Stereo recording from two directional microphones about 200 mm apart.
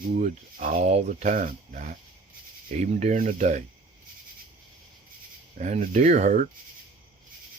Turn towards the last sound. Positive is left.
turn(degrees=-40)  # may be behind; listen again after turning